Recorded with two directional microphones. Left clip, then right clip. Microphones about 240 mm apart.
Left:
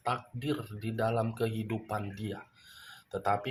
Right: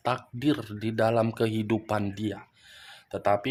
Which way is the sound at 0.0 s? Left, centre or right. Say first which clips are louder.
Right 6 dB; right.